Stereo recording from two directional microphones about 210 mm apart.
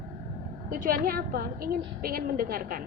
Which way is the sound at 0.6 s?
45° right (ahead or behind).